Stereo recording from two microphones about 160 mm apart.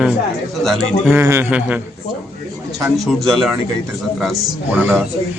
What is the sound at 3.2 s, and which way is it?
Speech, centre (ahead or behind).